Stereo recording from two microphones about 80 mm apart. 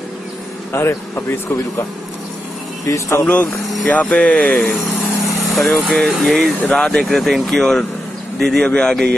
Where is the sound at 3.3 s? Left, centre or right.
Centre.